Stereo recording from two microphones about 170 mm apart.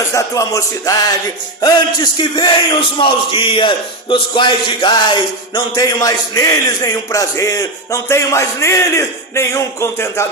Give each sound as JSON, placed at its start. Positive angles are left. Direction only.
{"t": 0.1, "sound": "a man's voice", "side_deg": 20}